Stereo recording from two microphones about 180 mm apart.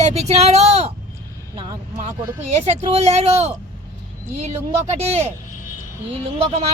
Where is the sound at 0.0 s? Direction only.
35° right (ahead or behind).